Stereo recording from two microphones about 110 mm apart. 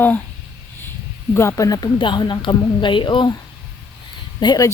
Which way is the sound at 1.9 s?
45° left (ahead or behind).